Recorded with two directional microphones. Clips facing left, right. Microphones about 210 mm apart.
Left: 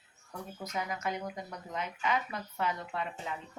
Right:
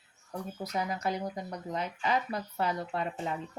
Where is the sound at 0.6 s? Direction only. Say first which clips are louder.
Right 3 dB; 35° right (ahead or behind).